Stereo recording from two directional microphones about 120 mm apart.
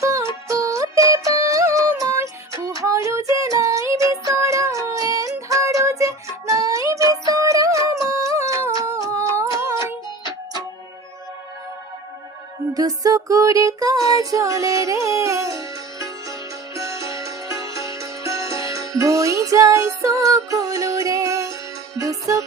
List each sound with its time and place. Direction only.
0.0 s music: 25° right (ahead or behind)
12.7 s music: 30° right (ahead or behind)